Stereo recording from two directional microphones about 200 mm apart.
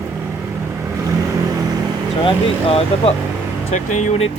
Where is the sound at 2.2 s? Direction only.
30° left (ahead or behind).